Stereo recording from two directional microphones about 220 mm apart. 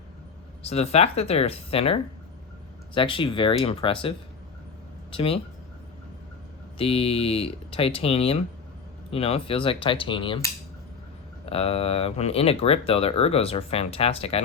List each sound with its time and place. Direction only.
0.6 s speech: 30° left (ahead or behind)
5.1 s speech: 25° left (ahead or behind)
6.7 s speech: 25° left (ahead or behind)